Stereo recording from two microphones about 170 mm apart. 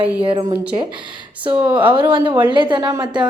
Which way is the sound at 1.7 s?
30° right (ahead or behind).